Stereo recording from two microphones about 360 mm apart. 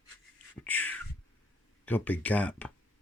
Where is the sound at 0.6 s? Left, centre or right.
Centre.